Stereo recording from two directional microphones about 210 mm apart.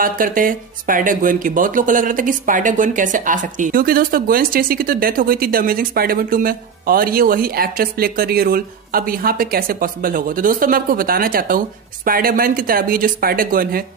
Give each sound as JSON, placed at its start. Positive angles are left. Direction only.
{"t": 0.0, "sound": "speech", "side_deg": -40}